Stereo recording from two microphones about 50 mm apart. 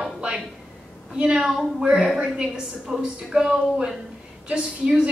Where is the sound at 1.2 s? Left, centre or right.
Centre.